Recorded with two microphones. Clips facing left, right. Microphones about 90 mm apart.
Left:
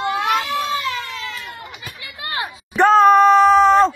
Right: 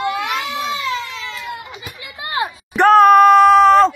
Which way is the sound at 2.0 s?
20° right (ahead or behind).